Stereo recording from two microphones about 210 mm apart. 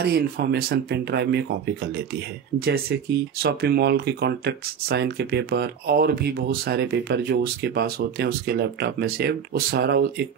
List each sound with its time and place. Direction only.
0.0 s speech: 50° right (ahead or behind)